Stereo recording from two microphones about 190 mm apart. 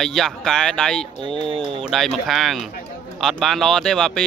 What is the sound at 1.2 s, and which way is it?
Speech, 25° right (ahead or behind).